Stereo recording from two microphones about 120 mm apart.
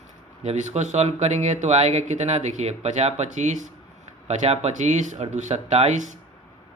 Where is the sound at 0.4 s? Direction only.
70° right (ahead or behind).